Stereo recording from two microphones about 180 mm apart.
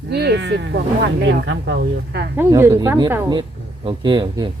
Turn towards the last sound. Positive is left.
turn(degrees=-25)  # may be behind; listen again after turning